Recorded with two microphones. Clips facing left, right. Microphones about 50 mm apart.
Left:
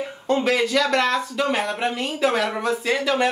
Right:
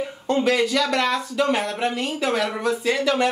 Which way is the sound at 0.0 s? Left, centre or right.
Centre.